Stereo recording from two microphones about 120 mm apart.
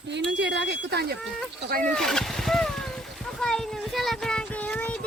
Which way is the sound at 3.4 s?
5° left (ahead or behind).